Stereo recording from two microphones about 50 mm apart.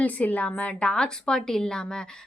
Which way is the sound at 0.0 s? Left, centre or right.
Left.